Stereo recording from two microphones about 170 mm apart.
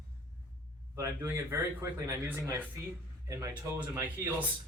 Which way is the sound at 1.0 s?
15° right (ahead or behind).